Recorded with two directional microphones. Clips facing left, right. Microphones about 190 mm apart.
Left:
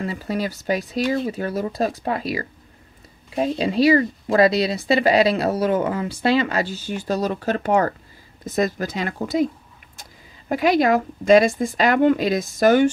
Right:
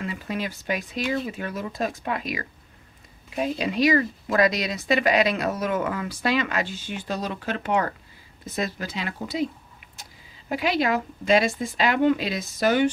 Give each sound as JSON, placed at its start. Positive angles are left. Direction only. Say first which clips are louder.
{"t": 0.0, "sound": "speech", "louder": "left 5 dB", "side_deg": 35}
{"t": 10.5, "sound": "speech", "louder": "left 6 dB", "side_deg": 45}